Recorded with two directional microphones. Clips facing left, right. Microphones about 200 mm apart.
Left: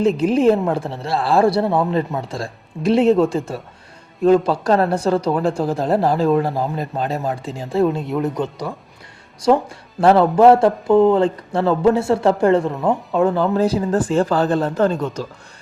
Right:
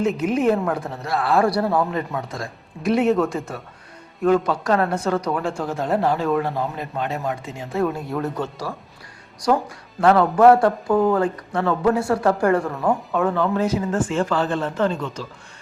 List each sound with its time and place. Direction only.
0.0 s a man's voice: 30° left (ahead or behind)